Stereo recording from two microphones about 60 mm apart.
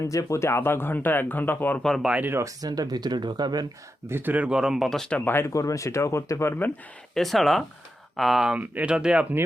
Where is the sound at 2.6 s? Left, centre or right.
Right.